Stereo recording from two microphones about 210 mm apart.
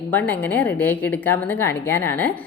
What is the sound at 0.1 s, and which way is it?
A woman's voice, 10° left (ahead or behind).